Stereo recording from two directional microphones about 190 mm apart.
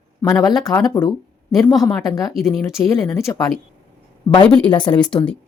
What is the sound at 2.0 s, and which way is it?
Speech, 20° left (ahead or behind).